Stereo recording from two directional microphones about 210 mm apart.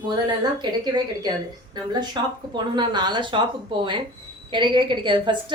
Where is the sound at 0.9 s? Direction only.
20° right (ahead or behind).